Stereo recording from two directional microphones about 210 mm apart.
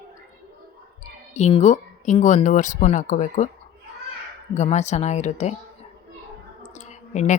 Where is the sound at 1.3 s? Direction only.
30° left (ahead or behind).